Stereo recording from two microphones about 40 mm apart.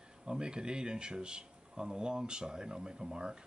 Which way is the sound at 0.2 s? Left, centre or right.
Right.